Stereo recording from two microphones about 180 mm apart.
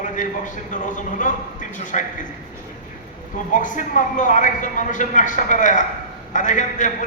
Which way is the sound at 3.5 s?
45° left (ahead or behind).